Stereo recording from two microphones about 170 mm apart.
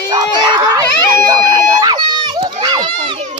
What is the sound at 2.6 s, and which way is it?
Children playing, 25° right (ahead or behind).